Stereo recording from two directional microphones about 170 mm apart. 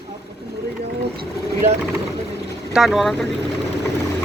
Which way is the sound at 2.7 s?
Centre (ahead or behind).